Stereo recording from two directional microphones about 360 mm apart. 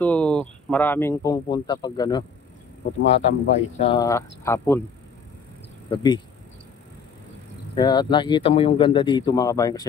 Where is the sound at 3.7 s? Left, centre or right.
Centre.